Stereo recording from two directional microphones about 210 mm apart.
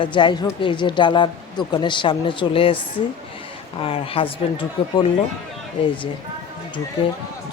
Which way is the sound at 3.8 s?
25° left (ahead or behind).